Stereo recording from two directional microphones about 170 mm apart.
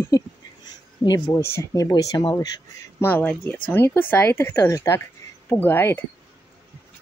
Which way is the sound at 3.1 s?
10° left (ahead or behind).